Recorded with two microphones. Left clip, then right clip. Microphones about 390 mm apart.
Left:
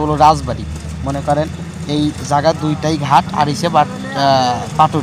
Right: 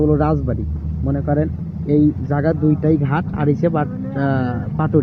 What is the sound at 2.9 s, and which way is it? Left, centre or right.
Speech, centre.